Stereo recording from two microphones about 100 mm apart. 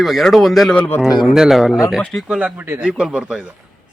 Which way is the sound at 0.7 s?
10° left (ahead or behind).